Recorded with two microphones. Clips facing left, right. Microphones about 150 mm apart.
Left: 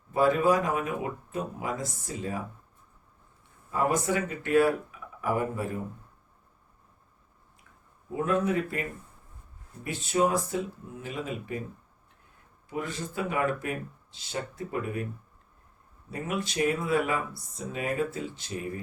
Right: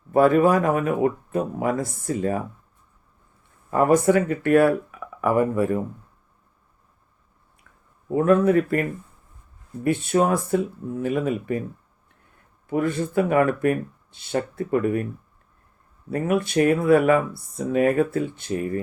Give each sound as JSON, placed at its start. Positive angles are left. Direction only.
{"t": 0.1, "sound": "speech", "side_deg": -55}
{"t": 3.7, "sound": "speech", "side_deg": -55}
{"t": 8.1, "sound": "speech", "side_deg": -55}
{"t": 12.6, "sound": "speech", "side_deg": -55}
{"t": 16.0, "sound": "speech", "side_deg": -60}